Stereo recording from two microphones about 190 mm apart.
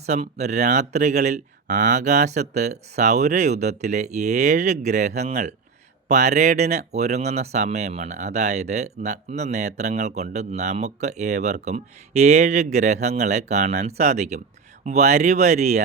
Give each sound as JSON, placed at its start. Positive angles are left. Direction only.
{"t": 0.0, "sound": "speech", "side_deg": -35}